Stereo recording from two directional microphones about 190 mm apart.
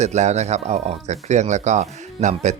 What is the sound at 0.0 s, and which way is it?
Speech, 35° right (ahead or behind).